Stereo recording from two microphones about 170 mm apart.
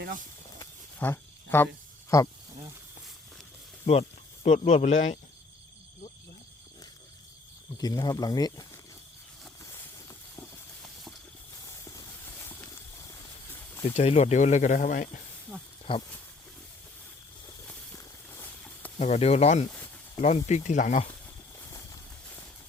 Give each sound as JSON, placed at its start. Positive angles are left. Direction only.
{"t": 0.6, "sound": "a sound", "side_deg": 15}
{"t": 4.4, "sound": "speech", "side_deg": 45}
{"t": 7.8, "sound": "speech", "side_deg": 20}
{"t": 11.6, "sound": "a sound", "side_deg": 20}
{"t": 13.8, "sound": "speech", "side_deg": 40}
{"t": 15.9, "sound": "speech", "side_deg": 30}
{"t": 17.7, "sound": "walk", "side_deg": 15}
{"t": 18.9, "sound": "speech", "side_deg": 40}